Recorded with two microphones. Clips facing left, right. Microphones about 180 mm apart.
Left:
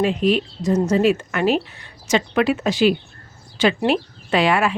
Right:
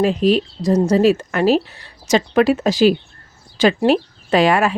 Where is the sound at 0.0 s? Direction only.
35° right (ahead or behind).